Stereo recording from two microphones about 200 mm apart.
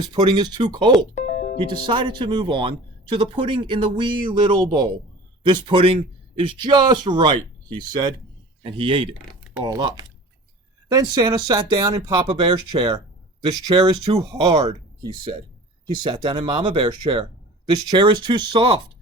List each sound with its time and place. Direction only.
0.0 s speech: 20° right (ahead or behind)
1.1 s music: 35° left (ahead or behind)
1.5 s speech: 25° right (ahead or behind)